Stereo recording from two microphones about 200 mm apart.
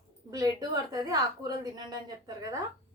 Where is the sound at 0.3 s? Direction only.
20° right (ahead or behind).